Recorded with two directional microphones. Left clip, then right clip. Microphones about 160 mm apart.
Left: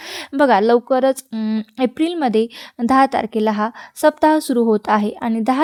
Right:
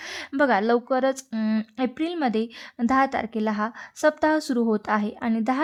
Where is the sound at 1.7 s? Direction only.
35° left (ahead or behind).